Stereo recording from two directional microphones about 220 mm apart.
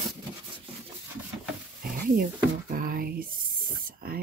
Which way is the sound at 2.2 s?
40° right (ahead or behind).